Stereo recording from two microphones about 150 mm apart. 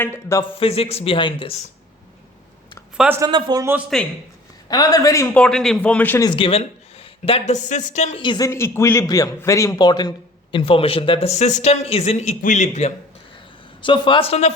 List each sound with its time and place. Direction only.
0.0 s a man's voice: 20° left (ahead or behind)
0.6 s a man's voice: 40° left (ahead or behind)
3.2 s speech: 30° right (ahead or behind)
3.6 s speech: 15° right (ahead or behind)
4.7 s a man's voice: 25° left (ahead or behind)
5.3 s speech: 5° left (ahead or behind)
6.2 s speech: 35° left (ahead or behind)
8.2 s a man's voice: 30° left (ahead or behind)
8.4 s a man's voice: 15° left (ahead or behind); by 12.9 s 50° left (ahead or behind)
13.8 s a man's voice: 35° left (ahead or behind)